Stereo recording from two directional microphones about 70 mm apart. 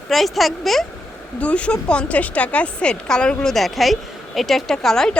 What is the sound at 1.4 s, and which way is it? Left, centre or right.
A woman's voice, centre.